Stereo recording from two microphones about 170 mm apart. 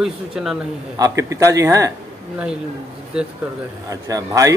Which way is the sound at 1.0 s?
20° right (ahead or behind).